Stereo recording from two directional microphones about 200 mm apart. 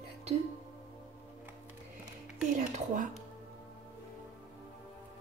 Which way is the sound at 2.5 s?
40° right (ahead or behind).